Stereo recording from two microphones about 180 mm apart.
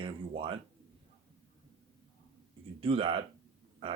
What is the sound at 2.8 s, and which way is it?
Speech, 30° right (ahead or behind).